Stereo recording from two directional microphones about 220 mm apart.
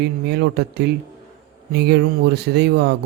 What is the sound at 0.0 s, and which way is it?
A man's voice, 50° right (ahead or behind).